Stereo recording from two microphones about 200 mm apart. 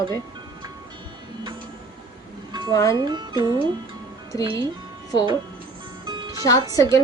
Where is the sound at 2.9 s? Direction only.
20° right (ahead or behind).